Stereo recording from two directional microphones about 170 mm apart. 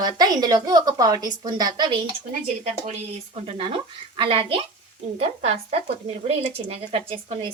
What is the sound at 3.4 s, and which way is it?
A woman's voice, 35° right (ahead or behind).